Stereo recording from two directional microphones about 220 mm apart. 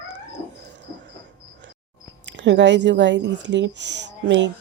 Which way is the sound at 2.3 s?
55° right (ahead or behind).